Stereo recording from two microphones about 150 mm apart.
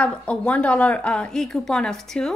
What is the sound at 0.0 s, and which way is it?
A woman's voice, 10° left (ahead or behind).